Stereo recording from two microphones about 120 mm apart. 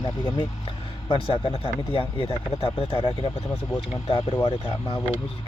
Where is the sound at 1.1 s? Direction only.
45° left (ahead or behind).